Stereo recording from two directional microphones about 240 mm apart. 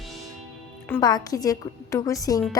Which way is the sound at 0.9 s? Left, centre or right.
Centre.